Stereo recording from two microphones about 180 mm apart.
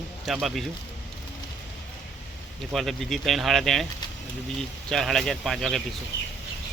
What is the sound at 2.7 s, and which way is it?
Speech, centre (ahead or behind).